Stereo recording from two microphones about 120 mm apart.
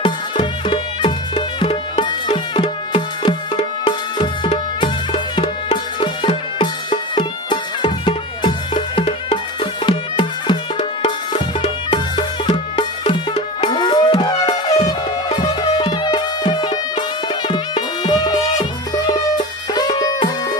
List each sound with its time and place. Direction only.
0.0 s music: 45° left (ahead or behind)